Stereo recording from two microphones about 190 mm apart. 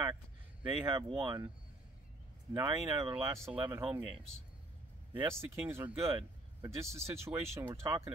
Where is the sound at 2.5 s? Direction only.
15° right (ahead or behind).